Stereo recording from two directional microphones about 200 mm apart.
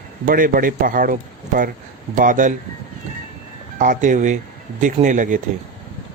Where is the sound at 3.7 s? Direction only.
40° right (ahead or behind).